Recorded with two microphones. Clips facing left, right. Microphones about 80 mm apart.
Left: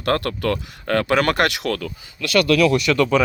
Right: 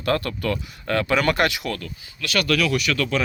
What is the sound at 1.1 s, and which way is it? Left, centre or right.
Speech, left.